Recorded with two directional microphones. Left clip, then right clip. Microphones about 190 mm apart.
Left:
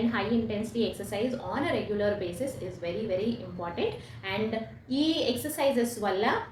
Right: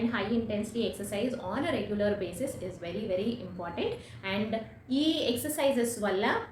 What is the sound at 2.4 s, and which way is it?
Speech, 15° right (ahead or behind).